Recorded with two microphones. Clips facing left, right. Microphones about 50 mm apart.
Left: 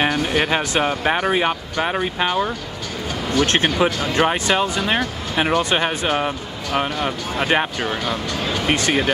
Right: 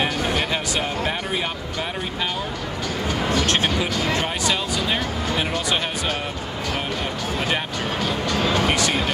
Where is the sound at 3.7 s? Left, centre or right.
Left.